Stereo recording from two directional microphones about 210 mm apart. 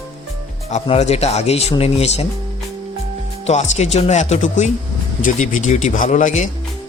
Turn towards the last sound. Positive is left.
turn(degrees=35)  # may be behind; listen again after turning